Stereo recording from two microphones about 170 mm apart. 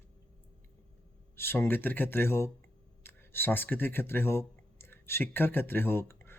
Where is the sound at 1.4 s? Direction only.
15° left (ahead or behind).